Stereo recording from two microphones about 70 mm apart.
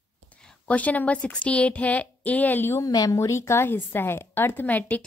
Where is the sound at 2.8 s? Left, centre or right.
Left.